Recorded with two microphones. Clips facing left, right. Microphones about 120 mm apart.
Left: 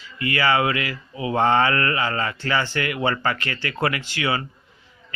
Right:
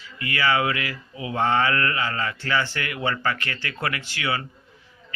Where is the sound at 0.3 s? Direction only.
35° left (ahead or behind).